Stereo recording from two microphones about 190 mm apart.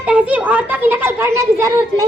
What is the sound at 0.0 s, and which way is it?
A child's voice, 5° right (ahead or behind).